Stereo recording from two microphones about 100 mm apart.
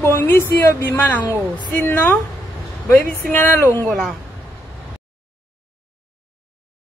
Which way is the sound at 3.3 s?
20° left (ahead or behind).